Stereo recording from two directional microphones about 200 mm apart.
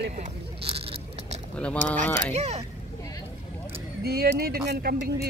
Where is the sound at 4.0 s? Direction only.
50° right (ahead or behind).